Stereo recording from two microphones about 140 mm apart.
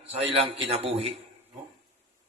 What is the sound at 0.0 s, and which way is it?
A man's voice, 45° right (ahead or behind).